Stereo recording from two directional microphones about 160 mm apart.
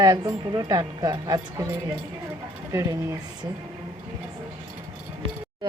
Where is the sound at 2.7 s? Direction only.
20° right (ahead or behind).